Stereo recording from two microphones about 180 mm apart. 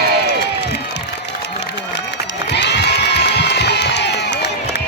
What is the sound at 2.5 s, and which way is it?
Crowd, 70° left (ahead or behind).